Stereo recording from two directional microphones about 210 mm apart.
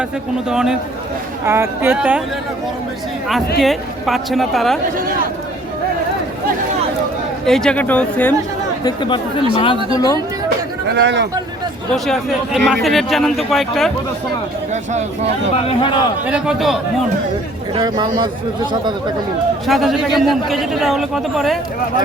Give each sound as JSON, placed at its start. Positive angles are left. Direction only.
{"t": 0.4, "sound": "a man's voice", "side_deg": -5}
{"t": 3.6, "sound": "a man's voice", "side_deg": 0}
{"t": 7.4, "sound": "a man's voice", "side_deg": 0}
{"t": 8.8, "sound": "speech", "side_deg": 20}
{"t": 10.9, "sound": "speech", "side_deg": -55}
{"t": 12.0, "sound": "a man's voice", "side_deg": 0}
{"t": 14.7, "sound": "speech", "side_deg": -35}
{"t": 15.6, "sound": "speech", "side_deg": 25}
{"t": 16.2, "sound": "a man's voice", "side_deg": -5}
{"t": 17.7, "sound": "speech", "side_deg": -20}
{"t": 19.6, "sound": "a man's voice", "side_deg": 0}